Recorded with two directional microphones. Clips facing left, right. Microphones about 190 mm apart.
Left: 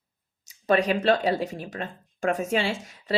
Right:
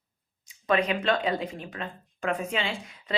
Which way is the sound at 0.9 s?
40° left (ahead or behind).